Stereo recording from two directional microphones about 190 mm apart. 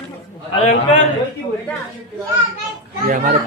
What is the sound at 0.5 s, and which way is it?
Speech, 35° left (ahead or behind).